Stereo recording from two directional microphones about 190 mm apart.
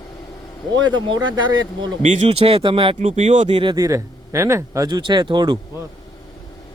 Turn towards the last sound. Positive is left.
turn(degrees=-25)  # may be behind; listen again after turning